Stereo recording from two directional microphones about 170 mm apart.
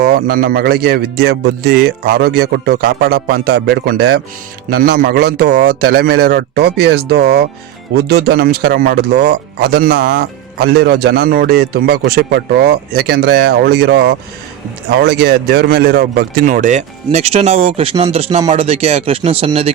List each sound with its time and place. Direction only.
0.0 s speech: 65° right (ahead or behind); by 4.2 s 80° right
4.7 s speech: 60° right (ahead or behind)
16.5 s speech: 50° right (ahead or behind)